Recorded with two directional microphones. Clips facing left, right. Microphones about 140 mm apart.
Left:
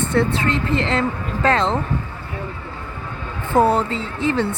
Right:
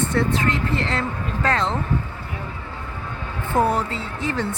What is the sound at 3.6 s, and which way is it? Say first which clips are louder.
Speech: left 4 dB; 25° left (ahead or behind).